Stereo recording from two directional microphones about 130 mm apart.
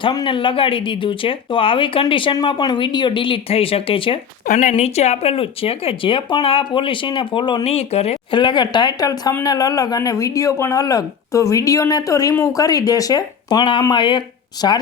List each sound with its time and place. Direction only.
0.0 s speech: 40° left (ahead or behind)
4.4 s speech: 90° left
4.7 s speech: 55° left (ahead or behind); by 7.6 s 40° left (ahead or behind)
7.6 s speech: 55° left (ahead or behind)
8.3 s speech: 35° left (ahead or behind)